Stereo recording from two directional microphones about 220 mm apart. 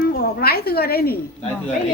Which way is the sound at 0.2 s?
45° left (ahead or behind).